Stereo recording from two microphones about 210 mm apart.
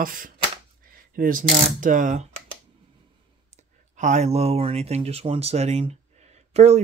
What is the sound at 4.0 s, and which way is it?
Speech, 35° right (ahead or behind).